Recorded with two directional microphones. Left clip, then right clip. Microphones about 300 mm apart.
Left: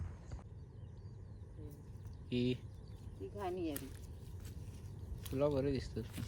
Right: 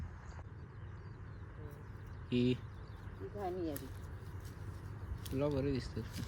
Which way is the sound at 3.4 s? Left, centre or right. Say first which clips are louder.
Right 1 dB; left.